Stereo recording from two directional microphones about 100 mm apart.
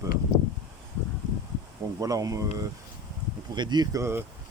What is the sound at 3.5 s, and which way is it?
Speech, 45° right (ahead or behind).